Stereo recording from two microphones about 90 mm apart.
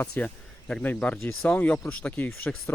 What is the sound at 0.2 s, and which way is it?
Speech, 20° left (ahead or behind).